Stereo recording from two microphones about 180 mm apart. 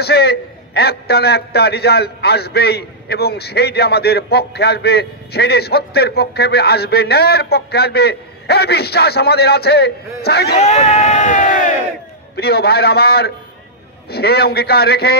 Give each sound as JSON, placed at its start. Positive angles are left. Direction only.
{"t": 0.0, "sound": "a man's voice", "side_deg": 60}
{"t": 10.6, "sound": "speech", "side_deg": 40}
{"t": 12.4, "sound": "a man's voice", "side_deg": 60}